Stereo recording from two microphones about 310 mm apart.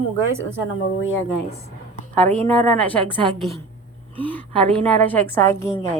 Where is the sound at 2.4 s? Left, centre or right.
Centre.